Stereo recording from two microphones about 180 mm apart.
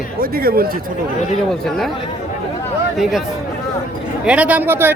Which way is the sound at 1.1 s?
40° left (ahead or behind).